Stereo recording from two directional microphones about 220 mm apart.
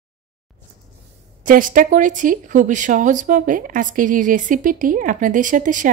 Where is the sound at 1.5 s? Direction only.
40° right (ahead or behind).